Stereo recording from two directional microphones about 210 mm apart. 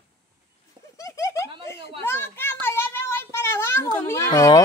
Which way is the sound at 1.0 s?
15° left (ahead or behind).